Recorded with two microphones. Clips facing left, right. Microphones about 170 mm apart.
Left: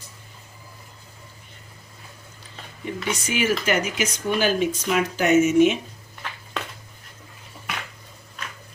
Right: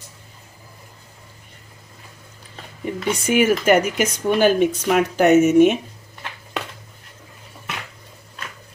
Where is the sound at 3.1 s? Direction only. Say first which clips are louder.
Right 7 dB; 55° right (ahead or behind).